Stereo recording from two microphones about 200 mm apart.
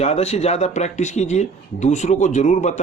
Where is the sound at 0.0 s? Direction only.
30° left (ahead or behind).